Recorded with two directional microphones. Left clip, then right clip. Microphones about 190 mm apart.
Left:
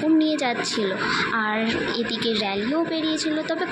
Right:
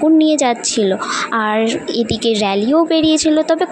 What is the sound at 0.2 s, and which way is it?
A woman's voice, 50° right (ahead or behind).